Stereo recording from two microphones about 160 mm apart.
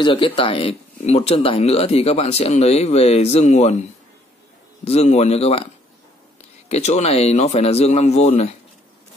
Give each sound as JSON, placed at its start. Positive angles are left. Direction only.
{"t": 0.0, "sound": "speech", "side_deg": 35}
{"t": 4.8, "sound": "speech", "side_deg": 40}
{"t": 6.7, "sound": "speech", "side_deg": 45}